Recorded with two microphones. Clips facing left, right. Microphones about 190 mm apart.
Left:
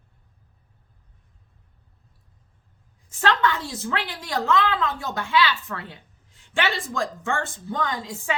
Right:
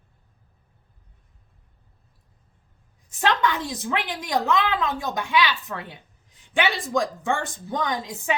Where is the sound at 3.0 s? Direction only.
15° right (ahead or behind).